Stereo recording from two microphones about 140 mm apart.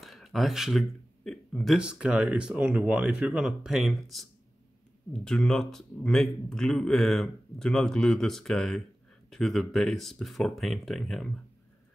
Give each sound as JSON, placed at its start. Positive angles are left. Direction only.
{"t": 0.0, "sound": "speech", "side_deg": 0}